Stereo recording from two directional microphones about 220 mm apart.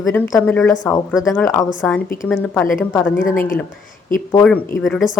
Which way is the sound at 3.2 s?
40° left (ahead or behind).